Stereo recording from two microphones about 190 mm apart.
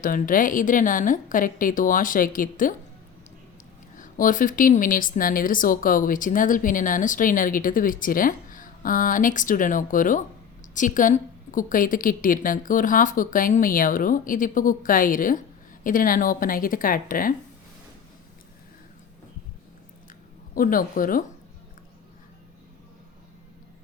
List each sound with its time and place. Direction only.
0.0 s speech: 45° left (ahead or behind)
3.9 s speech: 45° left (ahead or behind)
20.5 s speech: 45° left (ahead or behind)